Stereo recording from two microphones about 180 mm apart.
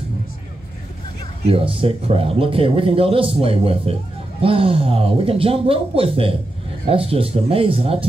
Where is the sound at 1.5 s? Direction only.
30° right (ahead or behind).